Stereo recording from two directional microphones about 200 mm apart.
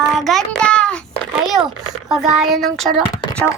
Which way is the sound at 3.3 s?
5° left (ahead or behind).